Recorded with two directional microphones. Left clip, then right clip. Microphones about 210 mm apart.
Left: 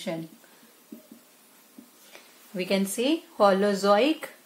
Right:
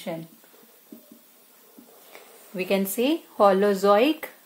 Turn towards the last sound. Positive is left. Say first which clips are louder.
# right 2 dB
turn(degrees=-30)  # may be behind; listen again after turning